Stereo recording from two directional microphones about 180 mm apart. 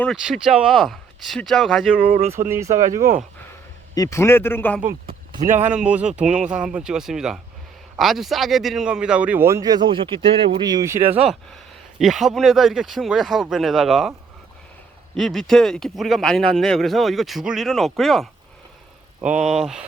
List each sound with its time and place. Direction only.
0.0 s speech: centre (ahead or behind)
2.1 s speech: 35° right (ahead or behind)
2.5 s a man's voice: 15° right (ahead or behind)
3.9 s a man's voice: 15° left (ahead or behind)
5.7 s a man's voice: 5° right (ahead or behind)
11.9 s speech: centre (ahead or behind)
15.1 s speech: centre (ahead or behind)